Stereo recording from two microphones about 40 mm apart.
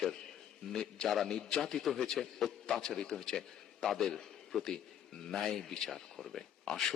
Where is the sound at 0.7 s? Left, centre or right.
Centre.